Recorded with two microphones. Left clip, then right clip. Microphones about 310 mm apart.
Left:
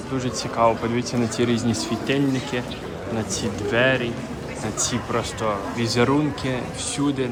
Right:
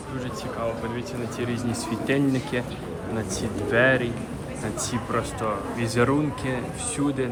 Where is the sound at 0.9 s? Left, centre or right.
Centre.